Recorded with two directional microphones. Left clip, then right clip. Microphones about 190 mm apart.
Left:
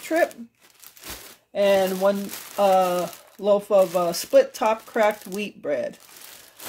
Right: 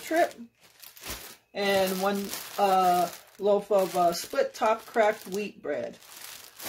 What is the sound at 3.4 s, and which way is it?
Speech, 50° left (ahead or behind).